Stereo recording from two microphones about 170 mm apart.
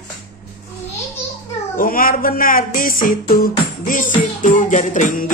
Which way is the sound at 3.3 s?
55° left (ahead or behind).